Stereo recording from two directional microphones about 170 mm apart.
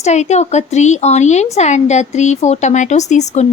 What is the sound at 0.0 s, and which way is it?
A woman's voice, 40° left (ahead or behind).